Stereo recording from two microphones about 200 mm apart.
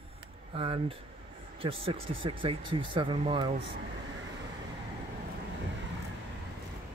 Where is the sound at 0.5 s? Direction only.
30° right (ahead or behind).